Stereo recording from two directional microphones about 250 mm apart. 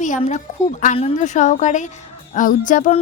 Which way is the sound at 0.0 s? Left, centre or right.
Left.